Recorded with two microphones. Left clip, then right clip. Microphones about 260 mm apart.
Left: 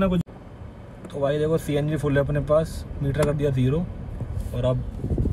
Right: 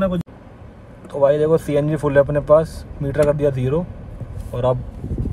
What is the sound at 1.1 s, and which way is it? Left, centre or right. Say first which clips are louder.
Speech: right 9 dB; right.